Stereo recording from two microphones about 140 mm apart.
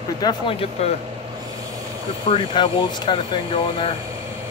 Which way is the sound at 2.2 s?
35° left (ahead or behind).